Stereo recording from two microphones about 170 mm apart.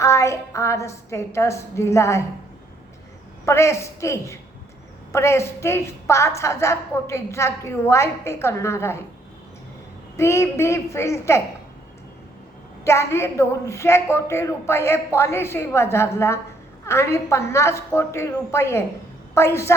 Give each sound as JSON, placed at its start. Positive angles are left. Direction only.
{"t": 0.0, "sound": "a woman's voice", "side_deg": 15}
{"t": 3.4, "sound": "a woman's voice", "side_deg": 15}
{"t": 10.2, "sound": "a woman's voice", "side_deg": 15}
{"t": 12.8, "sound": "a woman's voice", "side_deg": 15}